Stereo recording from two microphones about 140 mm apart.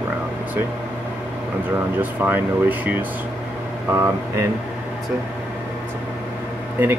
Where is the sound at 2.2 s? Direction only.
15° right (ahead or behind).